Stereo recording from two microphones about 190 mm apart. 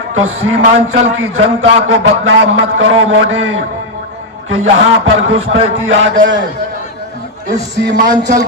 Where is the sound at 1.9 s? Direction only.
90° right.